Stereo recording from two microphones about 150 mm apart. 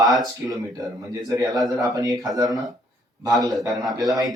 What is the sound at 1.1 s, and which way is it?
Speech, 25° right (ahead or behind).